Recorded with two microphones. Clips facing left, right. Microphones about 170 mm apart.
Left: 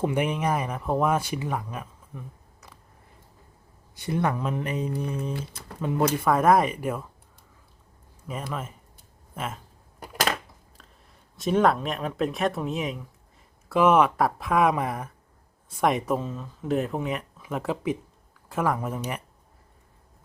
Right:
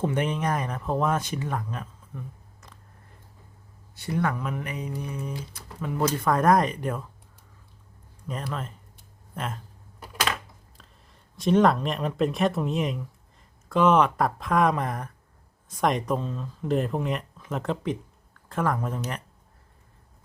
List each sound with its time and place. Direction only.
0.0 s speech: 10° left (ahead or behind)
3.9 s speech: 20° left (ahead or behind)
5.3 s speech: 60° left (ahead or behind)
5.8 s speech: 20° left (ahead or behind)
6.2 s speech: 5° left (ahead or behind)
8.3 s speech: 5° left (ahead or behind)
10.8 s speech: centre (ahead or behind)